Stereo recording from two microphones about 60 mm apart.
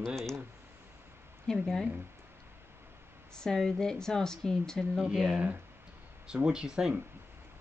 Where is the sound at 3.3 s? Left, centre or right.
Centre.